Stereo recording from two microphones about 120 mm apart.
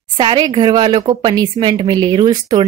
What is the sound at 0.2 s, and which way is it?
A woman's voice, 45° right (ahead or behind).